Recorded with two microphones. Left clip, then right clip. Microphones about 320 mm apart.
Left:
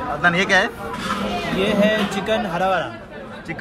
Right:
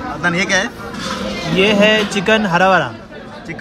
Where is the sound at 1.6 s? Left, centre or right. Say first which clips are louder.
Right 7 dB; right.